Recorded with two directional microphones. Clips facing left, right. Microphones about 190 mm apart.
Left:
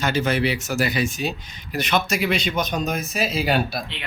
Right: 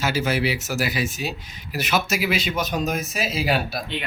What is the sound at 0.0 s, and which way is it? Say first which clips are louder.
Speech: left 1 dB; 5° right (ahead or behind).